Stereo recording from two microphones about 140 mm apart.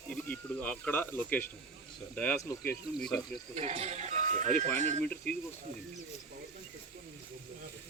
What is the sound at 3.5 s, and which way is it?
Speech, 50° right (ahead or behind).